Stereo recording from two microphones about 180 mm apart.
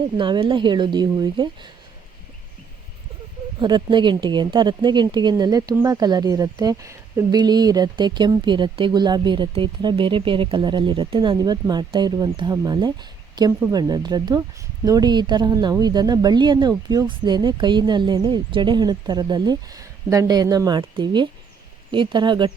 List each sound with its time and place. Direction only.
0.2 s speech: 25° right (ahead or behind)
3.6 s speech: 25° right (ahead or behind)